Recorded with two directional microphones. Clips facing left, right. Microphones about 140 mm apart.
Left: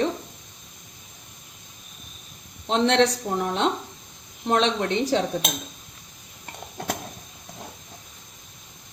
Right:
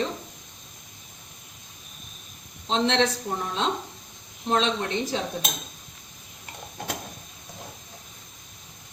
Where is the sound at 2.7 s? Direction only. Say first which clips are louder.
Left 3 dB; 65° left (ahead or behind).